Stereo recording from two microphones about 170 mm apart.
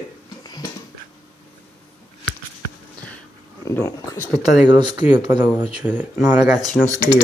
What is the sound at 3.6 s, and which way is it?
Speech, 15° left (ahead or behind).